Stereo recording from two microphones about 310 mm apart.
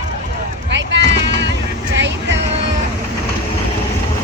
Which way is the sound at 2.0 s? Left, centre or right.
Right.